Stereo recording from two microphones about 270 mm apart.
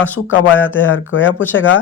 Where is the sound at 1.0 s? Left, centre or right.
Left.